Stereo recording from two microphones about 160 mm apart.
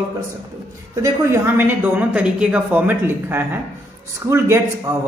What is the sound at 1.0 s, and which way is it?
A man's voice, 15° right (ahead or behind).